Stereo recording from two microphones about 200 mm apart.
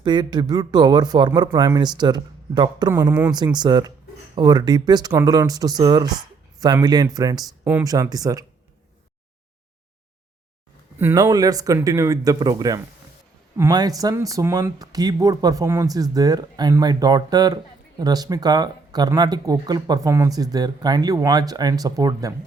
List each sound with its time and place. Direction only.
0.0 s speech: 20° right (ahead or behind)
10.9 s speech: 15° right (ahead or behind)